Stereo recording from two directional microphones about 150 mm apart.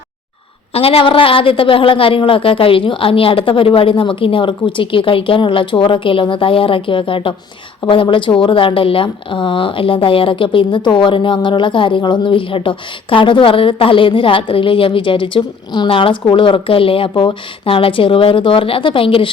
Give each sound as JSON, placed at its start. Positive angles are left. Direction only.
{"t": 0.7, "sound": "speech", "side_deg": 40}